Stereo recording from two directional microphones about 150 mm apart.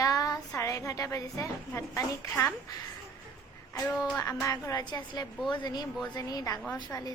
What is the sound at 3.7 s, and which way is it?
A woman's voice, 15° left (ahead or behind).